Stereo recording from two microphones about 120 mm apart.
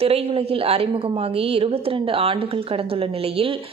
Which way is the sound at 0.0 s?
55° right (ahead or behind).